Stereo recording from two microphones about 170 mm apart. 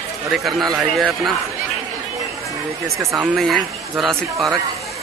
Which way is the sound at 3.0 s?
15° right (ahead or behind).